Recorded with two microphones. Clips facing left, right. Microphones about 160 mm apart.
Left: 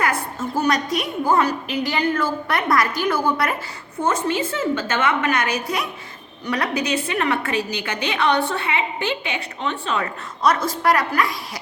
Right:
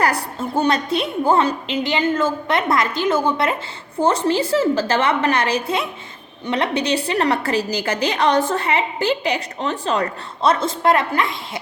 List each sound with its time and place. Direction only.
0.0 s a woman's voice: 35° right (ahead or behind)
10.4 s a woman's voice: 25° right (ahead or behind)